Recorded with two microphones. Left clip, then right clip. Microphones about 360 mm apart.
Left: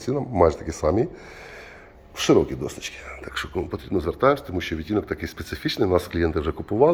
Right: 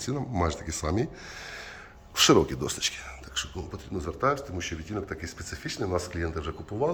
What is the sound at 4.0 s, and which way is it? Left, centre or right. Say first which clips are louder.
A man's voice: left 7 dB; centre.